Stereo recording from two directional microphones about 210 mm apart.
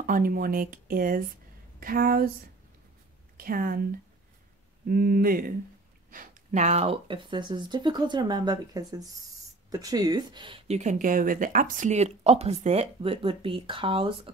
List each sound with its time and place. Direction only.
0.0 s speech: 40° right (ahead or behind)
3.3 s speech: 45° right (ahead or behind); by 14.3 s 25° right (ahead or behind)